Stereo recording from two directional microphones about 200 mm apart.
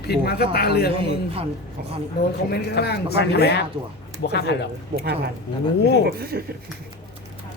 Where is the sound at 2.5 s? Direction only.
55° left (ahead or behind).